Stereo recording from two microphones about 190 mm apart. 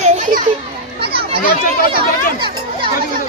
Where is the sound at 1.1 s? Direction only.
30° right (ahead or behind).